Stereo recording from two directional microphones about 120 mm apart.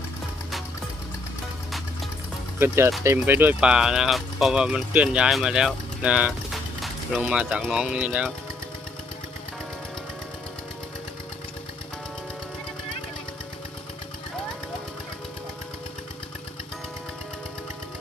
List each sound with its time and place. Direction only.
2.6 s speech: 20° right (ahead or behind)
6.5 s a sound: centre (ahead or behind)
7.2 s speech: 10° right (ahead or behind)